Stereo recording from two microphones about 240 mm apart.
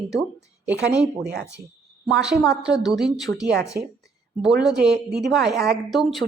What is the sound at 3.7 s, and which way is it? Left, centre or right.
Speech, right.